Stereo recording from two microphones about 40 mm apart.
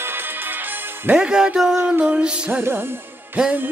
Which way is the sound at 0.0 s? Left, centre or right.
Right.